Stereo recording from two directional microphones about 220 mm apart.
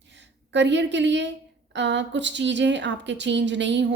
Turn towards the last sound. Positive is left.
turn(degrees=-55)  # may be behind; listen again after turning